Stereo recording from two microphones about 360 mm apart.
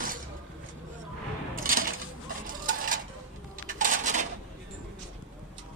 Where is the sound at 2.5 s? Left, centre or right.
Right.